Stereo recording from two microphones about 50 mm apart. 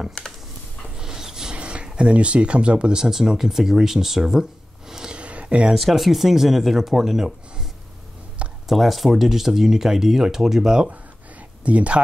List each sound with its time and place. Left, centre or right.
0.9 s a sound: centre
5.8 s speech: centre
11.6 s speech: right